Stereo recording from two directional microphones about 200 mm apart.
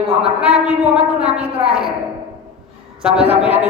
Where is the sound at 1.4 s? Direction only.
30° right (ahead or behind).